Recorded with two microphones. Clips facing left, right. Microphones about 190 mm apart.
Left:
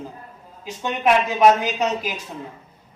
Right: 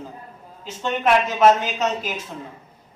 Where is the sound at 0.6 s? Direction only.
15° left (ahead or behind).